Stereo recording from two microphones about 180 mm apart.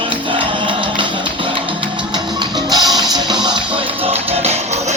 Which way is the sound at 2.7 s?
20° right (ahead or behind).